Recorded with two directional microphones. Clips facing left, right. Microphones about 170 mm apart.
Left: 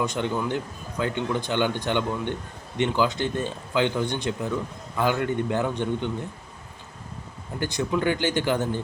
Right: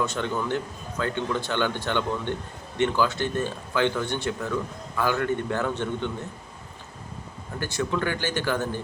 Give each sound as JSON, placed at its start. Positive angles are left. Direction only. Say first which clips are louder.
{"t": 0.0, "sound": "speech", "louder": "left 1 dB", "side_deg": 15}
{"t": 7.6, "sound": "speech", "louder": "left 2 dB", "side_deg": 15}